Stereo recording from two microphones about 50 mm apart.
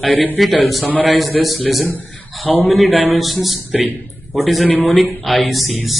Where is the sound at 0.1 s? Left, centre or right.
Left.